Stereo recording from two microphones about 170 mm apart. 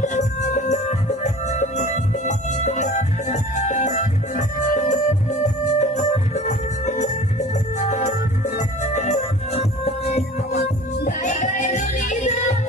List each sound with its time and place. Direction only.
0.0 s music: 45° left (ahead or behind)